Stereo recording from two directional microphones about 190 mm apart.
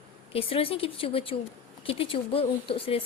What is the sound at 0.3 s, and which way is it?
A woman's voice, 30° left (ahead or behind).